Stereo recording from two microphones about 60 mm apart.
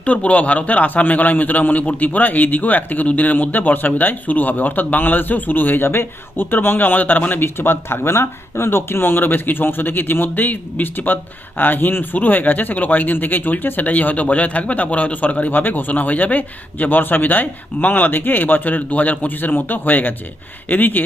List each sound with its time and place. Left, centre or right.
0.0 s a man's voice: left